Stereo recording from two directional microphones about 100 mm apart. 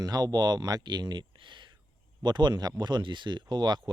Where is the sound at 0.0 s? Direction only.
40° right (ahead or behind).